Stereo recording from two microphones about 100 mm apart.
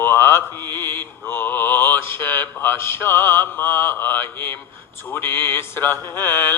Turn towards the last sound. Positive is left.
turn(degrees=20)  # may be behind; listen again after turning